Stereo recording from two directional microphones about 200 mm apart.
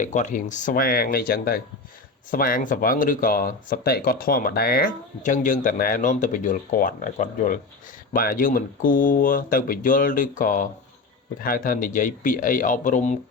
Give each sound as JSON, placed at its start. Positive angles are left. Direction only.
{"t": 0.0, "sound": "speech", "side_deg": 40}